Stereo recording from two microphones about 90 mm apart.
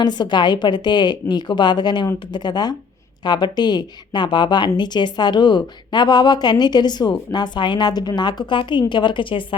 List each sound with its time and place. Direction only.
0.0 s speech: 55° left (ahead or behind)